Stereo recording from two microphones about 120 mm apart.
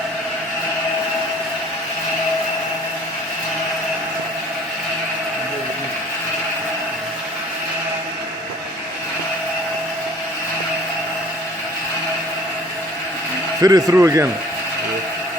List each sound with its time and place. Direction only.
13.6 s speech: 30° right (ahead or behind)